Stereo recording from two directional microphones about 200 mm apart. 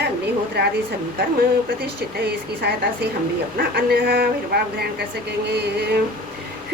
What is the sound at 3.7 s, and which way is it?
Speech, 50° right (ahead or behind).